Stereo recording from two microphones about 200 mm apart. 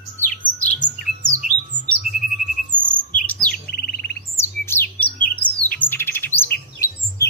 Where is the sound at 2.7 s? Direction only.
25° right (ahead or behind).